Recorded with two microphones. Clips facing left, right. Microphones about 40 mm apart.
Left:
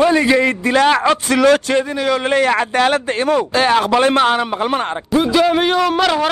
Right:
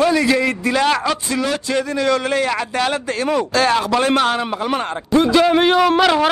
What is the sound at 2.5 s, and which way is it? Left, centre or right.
Speech, left.